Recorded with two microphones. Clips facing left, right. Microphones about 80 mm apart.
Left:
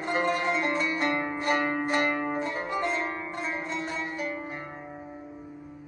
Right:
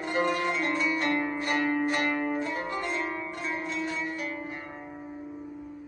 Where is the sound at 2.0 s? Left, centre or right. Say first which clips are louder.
Even; centre.